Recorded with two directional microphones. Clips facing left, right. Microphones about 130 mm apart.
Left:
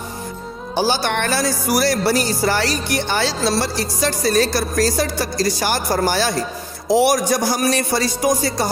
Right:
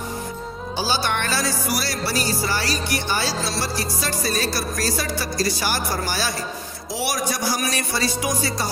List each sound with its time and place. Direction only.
0.7 s music: 55° left (ahead or behind)
3.4 s speech: 55° left (ahead or behind)